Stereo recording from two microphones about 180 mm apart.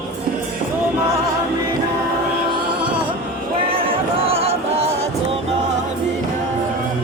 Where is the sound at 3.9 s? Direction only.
30° right (ahead or behind).